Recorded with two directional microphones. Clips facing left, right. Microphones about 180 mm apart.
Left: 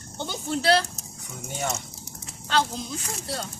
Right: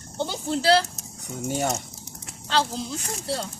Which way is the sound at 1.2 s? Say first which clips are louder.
Right 6 dB; 40° right (ahead or behind).